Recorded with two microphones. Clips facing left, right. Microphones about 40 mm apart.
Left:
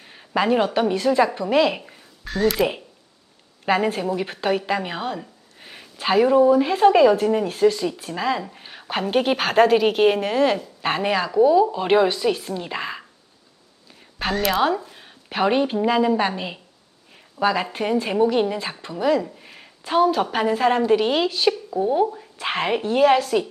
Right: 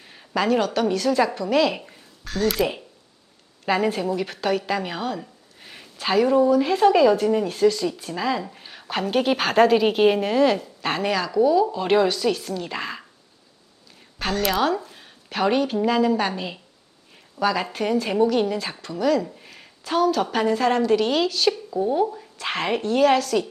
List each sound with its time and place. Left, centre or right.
0.0 s a sound: centre
0.3 s a woman's voice: centre
1.8 s speech: centre
4.2 s a woman's voice: left
5.2 s speech: centre
14.2 s a woman's voice: centre
14.8 s a sound: centre
15.3 s speech: centre
19.5 s a sound: centre
20.3 s speech: centre